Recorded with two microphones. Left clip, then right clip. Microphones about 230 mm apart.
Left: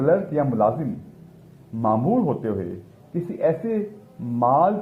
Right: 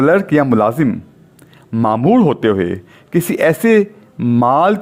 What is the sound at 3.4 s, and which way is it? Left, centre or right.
Speech, right.